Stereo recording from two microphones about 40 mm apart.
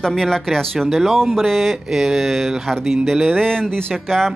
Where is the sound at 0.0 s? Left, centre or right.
Centre.